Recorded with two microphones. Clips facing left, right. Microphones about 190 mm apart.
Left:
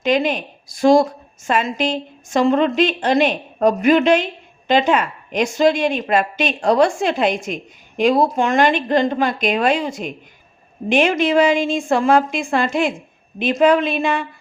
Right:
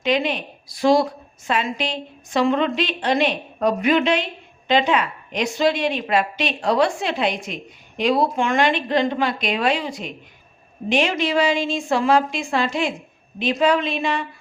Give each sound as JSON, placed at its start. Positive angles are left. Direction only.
{"t": 0.0, "sound": "speech", "side_deg": 45}